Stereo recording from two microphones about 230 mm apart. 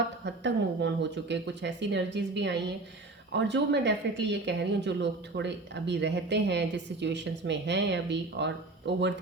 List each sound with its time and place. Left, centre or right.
0.3 s a woman's voice: right